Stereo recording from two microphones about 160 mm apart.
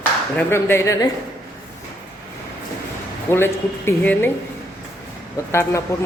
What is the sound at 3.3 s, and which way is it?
Speech, 15° left (ahead or behind).